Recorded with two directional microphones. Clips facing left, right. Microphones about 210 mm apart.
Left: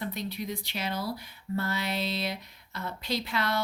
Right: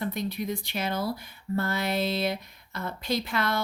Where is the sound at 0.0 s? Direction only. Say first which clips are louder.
Right 4 dB; 50° right (ahead or behind).